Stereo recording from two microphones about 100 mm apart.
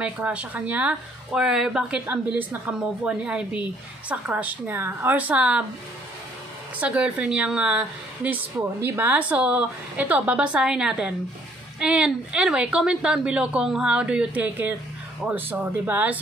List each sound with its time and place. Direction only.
0.0 s a woman's voice: 15° right (ahead or behind)
6.8 s a woman's voice: 15° right (ahead or behind)